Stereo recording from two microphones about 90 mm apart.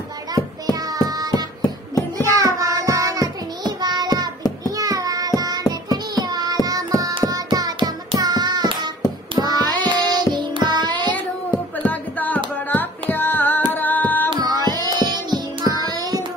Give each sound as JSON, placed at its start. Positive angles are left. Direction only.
{"t": 0.3, "sound": "music", "side_deg": -45}
{"t": 2.1, "sound": "child singing", "side_deg": -40}
{"t": 11.8, "sound": "music", "side_deg": 20}
{"t": 13.1, "sound": "carnatic music", "side_deg": 20}
{"t": 14.3, "sound": "music", "side_deg": -50}
{"t": 15.9, "sound": "hands", "side_deg": -45}